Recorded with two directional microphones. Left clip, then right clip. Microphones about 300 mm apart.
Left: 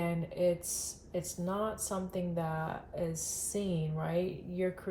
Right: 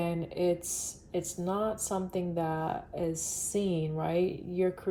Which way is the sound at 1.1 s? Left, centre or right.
Right.